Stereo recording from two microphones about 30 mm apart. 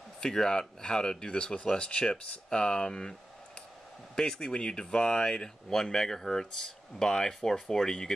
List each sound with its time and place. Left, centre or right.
0.2 s speech: left